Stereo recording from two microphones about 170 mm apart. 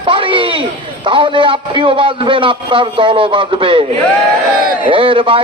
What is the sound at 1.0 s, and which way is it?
A man's voice, 30° right (ahead or behind).